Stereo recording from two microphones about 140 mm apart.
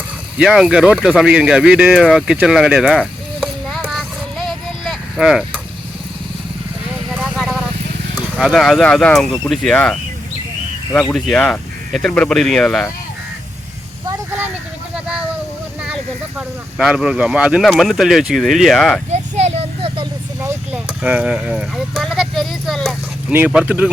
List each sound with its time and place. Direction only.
0.3 s speech: 5° right (ahead or behind)
0.9 s a sound: 5° right (ahead or behind)
8.4 s speech: centre (ahead or behind)
11.1 s speech: 5° left (ahead or behind)
16.7 s speech: 5° right (ahead or behind)
19.1 s vehicle: 50° right (ahead or behind)
20.4 s a sound: 15° right (ahead or behind); by 23.0 s centre (ahead or behind)
23.3 s speech: 10° right (ahead or behind)